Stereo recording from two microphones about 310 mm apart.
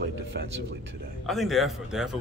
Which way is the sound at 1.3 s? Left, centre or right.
Centre.